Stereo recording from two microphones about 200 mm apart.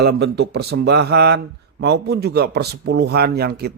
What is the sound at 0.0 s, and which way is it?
Speech, 55° right (ahead or behind).